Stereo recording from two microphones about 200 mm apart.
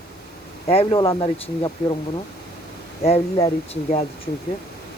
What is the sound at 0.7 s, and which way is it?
Speech, 30° left (ahead or behind).